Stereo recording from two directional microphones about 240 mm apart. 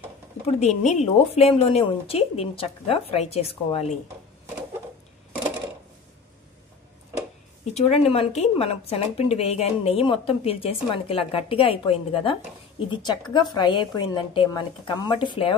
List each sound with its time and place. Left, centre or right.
0.6 s speech: left
7.7 s speech: left